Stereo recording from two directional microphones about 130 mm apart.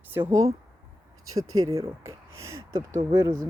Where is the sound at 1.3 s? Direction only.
25° right (ahead or behind).